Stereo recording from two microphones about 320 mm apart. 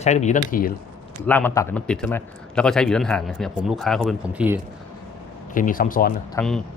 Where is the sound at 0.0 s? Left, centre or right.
Left.